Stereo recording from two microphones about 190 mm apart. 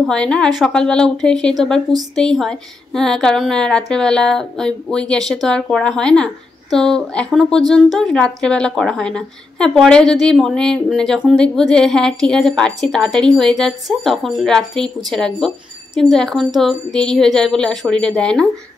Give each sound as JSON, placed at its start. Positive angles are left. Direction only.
{"t": 0.0, "sound": "a woman's voice", "side_deg": 5}